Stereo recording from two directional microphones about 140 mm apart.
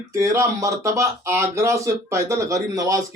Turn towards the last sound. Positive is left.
turn(degrees=-25)  # may be behind; listen again after turning